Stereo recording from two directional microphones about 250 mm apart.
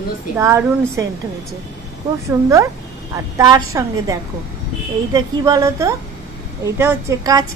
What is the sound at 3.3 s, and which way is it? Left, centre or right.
Speech, centre.